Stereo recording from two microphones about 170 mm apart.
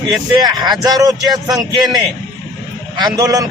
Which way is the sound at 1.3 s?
Centre (ahead or behind).